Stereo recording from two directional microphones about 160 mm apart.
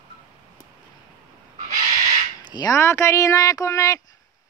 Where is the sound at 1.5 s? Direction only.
50° right (ahead or behind).